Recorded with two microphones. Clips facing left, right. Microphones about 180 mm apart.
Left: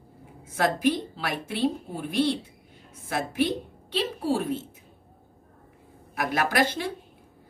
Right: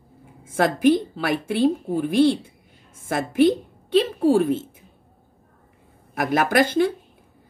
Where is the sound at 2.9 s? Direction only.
50° right (ahead or behind).